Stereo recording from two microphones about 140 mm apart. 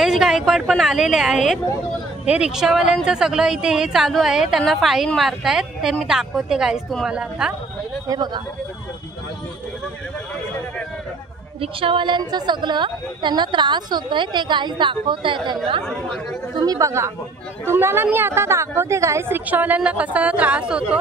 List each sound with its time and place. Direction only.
0.0 s a woman's voice: 5° right (ahead or behind)
8.1 s speech: 30° right (ahead or behind)
11.6 s a woman's voice: 40° right (ahead or behind)
15.8 s a woman's voice: 5° left (ahead or behind)
16.5 s a woman's voice: 25° right (ahead or behind); by 21.0 s 10° right (ahead or behind)